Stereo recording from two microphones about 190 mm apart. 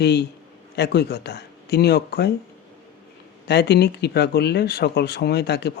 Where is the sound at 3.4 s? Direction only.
60° left (ahead or behind).